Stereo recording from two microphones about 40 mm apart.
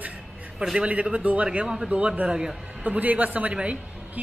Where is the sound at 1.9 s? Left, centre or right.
Right.